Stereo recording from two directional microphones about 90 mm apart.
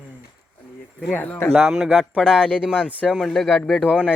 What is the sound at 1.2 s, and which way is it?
Speech, 25° left (ahead or behind).